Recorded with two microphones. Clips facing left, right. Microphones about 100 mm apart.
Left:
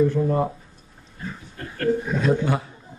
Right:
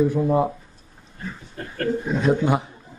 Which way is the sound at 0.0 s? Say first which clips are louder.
Right 1 dB; 15° right (ahead or behind).